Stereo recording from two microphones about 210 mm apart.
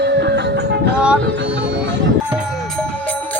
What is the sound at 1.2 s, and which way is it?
Speech, 55° right (ahead or behind).